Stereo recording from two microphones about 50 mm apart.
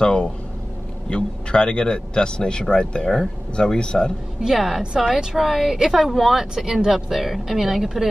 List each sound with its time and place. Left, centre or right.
0.0 s a sound: centre
1.1 s speech: centre
4.4 s a woman's voice: centre